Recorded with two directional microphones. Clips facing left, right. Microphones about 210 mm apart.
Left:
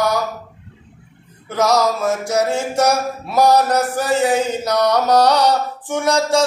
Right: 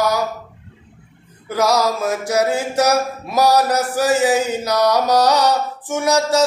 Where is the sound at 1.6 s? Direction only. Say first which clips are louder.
Left 1 dB; 60° right (ahead or behind).